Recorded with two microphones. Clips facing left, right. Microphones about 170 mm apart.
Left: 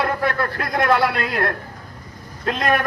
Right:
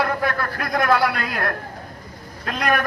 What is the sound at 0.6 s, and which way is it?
A man's voice, 25° left (ahead or behind).